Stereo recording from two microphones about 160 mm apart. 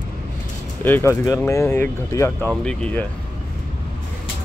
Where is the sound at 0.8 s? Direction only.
15° left (ahead or behind).